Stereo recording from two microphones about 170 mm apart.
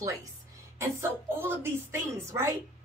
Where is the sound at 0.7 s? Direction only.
15° right (ahead or behind).